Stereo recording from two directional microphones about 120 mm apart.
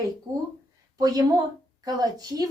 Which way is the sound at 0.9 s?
30° right (ahead or behind).